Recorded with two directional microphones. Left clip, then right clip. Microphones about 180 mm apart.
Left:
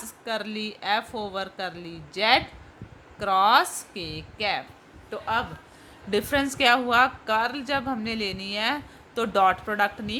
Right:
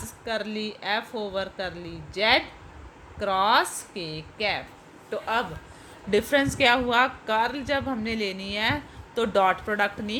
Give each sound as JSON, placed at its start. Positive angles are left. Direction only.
{"t": 0.0, "sound": "speech", "side_deg": 20}
{"t": 5.1, "sound": "a woman's voice", "side_deg": 10}